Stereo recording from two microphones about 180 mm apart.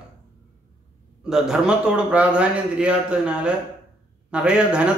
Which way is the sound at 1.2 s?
5° right (ahead or behind).